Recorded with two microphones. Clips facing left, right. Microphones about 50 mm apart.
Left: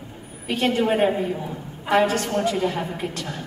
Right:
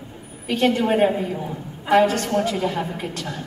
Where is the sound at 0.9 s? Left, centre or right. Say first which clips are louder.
Right 2 dB; centre.